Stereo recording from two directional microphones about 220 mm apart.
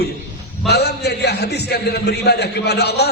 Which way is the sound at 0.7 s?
50° left (ahead or behind).